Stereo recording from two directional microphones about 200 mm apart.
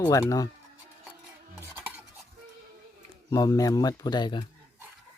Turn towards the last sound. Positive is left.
turn(degrees=20)  # may be behind; listen again after turning